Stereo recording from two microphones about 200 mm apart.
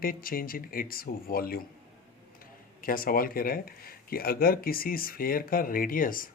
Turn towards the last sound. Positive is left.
turn(degrees=45)  # may be behind; listen again after turning